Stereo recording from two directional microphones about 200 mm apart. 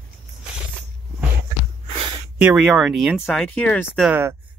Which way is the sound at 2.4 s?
5° right (ahead or behind).